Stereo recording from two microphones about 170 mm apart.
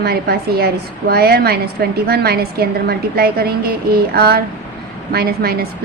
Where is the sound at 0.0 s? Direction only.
65° right (ahead or behind).